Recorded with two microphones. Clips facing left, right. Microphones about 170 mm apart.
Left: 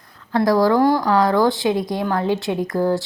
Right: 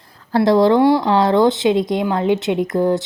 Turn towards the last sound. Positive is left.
turn(degrees=-20)  # may be behind; listen again after turning